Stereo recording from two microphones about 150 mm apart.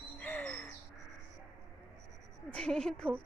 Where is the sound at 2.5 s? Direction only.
5° left (ahead or behind).